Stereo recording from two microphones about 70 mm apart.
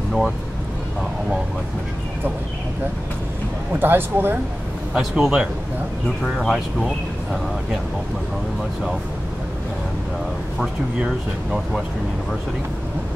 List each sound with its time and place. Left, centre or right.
3.8 s speech: right
4.9 s a man's voice: centre